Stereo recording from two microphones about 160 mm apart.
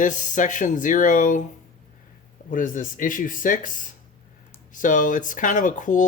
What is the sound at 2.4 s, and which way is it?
Speech, 55° left (ahead or behind).